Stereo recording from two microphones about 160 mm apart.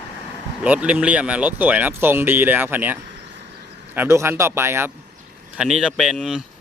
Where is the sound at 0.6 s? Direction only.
10° right (ahead or behind).